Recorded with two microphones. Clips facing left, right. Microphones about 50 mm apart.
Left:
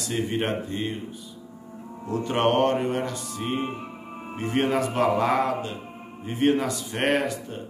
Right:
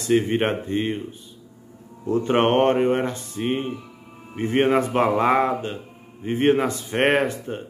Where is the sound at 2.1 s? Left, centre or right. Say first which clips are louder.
Right 4 dB; right.